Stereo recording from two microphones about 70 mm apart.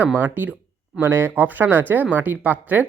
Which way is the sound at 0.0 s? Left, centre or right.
Right.